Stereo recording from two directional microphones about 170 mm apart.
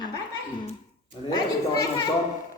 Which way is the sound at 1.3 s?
20° left (ahead or behind).